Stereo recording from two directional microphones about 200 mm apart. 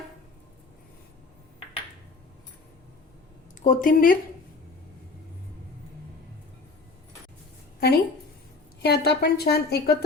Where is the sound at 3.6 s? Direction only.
45° left (ahead or behind).